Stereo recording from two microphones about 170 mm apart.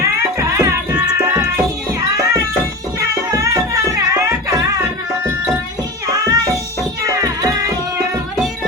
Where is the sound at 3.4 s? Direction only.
20° right (ahead or behind).